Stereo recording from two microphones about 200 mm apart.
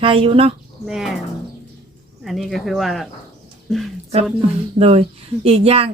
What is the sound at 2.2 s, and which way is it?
Speech, centre (ahead or behind).